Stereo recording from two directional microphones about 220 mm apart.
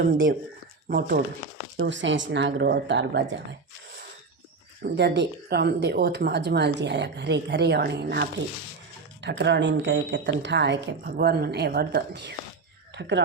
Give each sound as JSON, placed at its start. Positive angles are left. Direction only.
{"t": 0.9, "sound": "speech", "side_deg": -45}
{"t": 4.8, "sound": "speech", "side_deg": -50}